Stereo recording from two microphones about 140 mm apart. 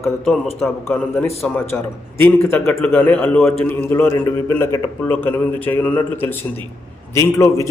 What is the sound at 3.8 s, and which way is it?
A man's voice, 15° left (ahead or behind).